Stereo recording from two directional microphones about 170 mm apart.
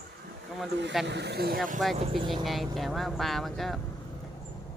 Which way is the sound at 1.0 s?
85° right.